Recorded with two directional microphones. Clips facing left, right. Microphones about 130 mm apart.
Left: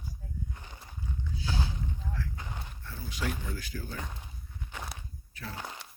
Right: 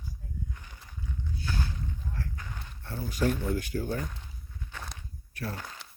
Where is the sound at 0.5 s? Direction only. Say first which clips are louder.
Left 2 dB; 25° left (ahead or behind).